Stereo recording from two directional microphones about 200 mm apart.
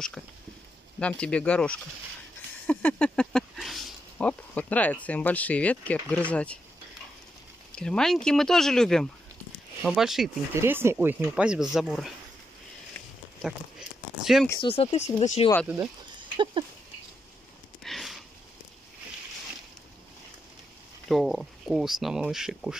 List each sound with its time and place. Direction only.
0.9 s speech: 5° left (ahead or behind)
7.7 s speech: 5° left (ahead or behind)
10.5 s speech: 10° right (ahead or behind)
13.4 s speech: centre (ahead or behind)
14.6 s speech: 30° left (ahead or behind)
17.8 s sniff: centre (ahead or behind)
21.1 s speech: centre (ahead or behind)